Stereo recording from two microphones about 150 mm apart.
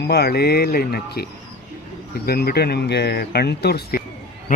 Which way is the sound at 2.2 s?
90° left.